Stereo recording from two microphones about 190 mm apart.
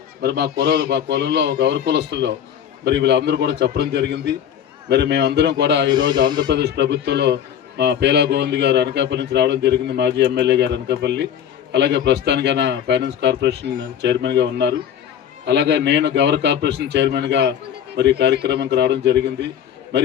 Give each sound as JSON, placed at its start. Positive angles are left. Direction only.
{"t": 0.2, "sound": "a man's voice", "side_deg": -60}
{"t": 6.2, "sound": "speech", "side_deg": -25}
{"t": 6.5, "sound": "a man's voice", "side_deg": -60}